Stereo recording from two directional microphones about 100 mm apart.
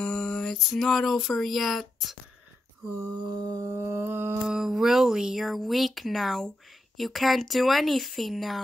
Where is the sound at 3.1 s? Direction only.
45° right (ahead or behind); by 4.3 s 20° right (ahead or behind).